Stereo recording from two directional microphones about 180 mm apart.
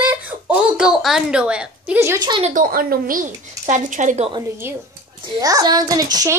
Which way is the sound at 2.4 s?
50° right (ahead or behind).